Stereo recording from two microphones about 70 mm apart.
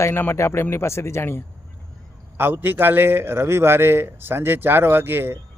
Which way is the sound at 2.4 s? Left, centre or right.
Right.